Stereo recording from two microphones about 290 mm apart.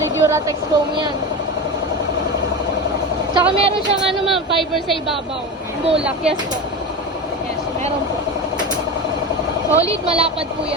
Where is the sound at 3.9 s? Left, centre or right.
Centre.